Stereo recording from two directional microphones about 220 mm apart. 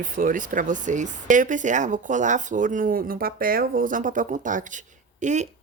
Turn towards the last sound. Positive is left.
turn(degrees=-30)  # may be behind; listen again after turning